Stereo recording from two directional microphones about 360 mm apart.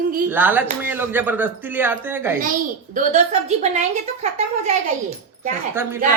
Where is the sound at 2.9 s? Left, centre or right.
Centre.